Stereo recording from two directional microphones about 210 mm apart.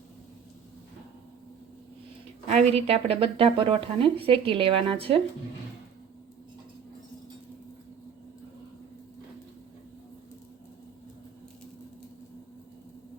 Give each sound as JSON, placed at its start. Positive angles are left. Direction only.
{"t": 2.5, "sound": "speech", "side_deg": -30}